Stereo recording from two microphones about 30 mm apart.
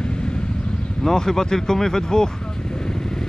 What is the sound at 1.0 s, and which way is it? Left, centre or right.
Speech, centre.